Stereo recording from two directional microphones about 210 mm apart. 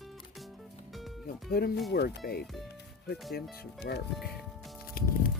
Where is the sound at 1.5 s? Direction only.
45° left (ahead or behind).